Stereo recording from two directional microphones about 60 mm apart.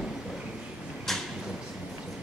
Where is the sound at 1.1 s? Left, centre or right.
Centre.